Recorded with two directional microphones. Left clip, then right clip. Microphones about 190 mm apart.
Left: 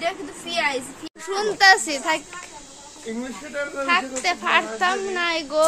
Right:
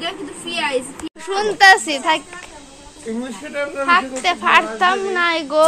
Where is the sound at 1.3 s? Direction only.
5° left (ahead or behind).